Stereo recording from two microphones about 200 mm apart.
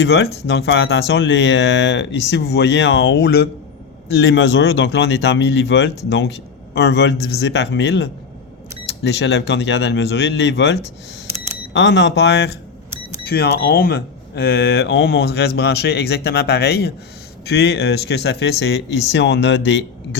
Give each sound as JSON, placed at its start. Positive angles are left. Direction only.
{"t": 0.0, "sound": "speech", "side_deg": 55}
{"t": 4.1, "sound": "speech", "side_deg": 65}